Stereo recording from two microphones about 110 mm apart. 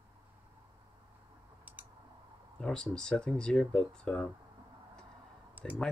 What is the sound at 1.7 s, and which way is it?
Clicking, 15° right (ahead or behind).